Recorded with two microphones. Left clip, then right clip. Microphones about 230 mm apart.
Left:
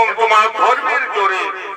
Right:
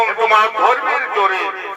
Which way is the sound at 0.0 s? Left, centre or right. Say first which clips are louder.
Left 1 dB; left.